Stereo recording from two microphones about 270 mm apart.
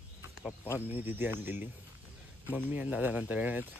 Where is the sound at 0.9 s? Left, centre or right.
Centre.